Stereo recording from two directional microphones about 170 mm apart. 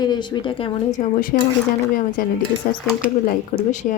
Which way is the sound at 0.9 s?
50° left (ahead or behind).